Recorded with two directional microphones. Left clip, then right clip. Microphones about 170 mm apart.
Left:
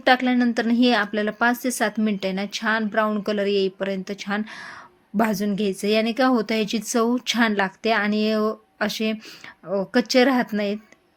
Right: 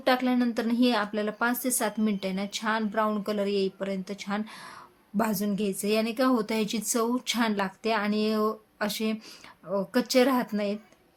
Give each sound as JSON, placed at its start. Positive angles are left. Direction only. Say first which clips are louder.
{"t": 0.0, "sound": "speech", "louder": "left 6 dB", "side_deg": 35}